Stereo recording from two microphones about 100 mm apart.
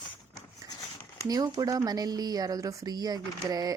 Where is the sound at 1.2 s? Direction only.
40° right (ahead or behind).